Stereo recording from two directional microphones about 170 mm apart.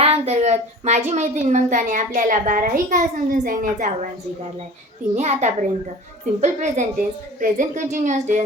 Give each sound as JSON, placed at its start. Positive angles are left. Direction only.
{"t": 0.0, "sound": "a woman's voice", "side_deg": -40}
{"t": 5.1, "sound": "a woman's voice", "side_deg": -45}